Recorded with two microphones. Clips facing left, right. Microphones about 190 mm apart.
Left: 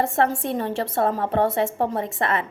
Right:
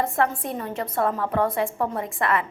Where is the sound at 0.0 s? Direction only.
30° left (ahead or behind).